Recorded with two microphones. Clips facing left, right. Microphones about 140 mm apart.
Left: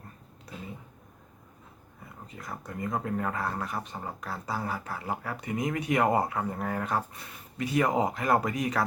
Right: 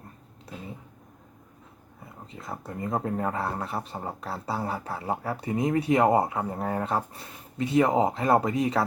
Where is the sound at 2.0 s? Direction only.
25° right (ahead or behind).